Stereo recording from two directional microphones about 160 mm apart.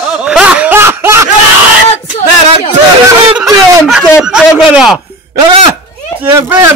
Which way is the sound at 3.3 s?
5° right (ahead or behind).